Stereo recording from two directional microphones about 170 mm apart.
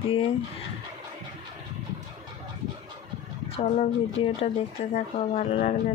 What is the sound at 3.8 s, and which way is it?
Speech, 40° left (ahead or behind).